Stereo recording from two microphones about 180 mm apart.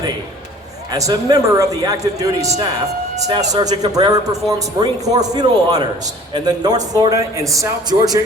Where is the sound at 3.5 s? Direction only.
20° right (ahead or behind).